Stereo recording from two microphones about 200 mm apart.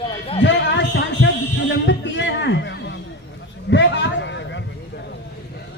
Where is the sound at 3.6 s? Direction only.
65° left (ahead or behind).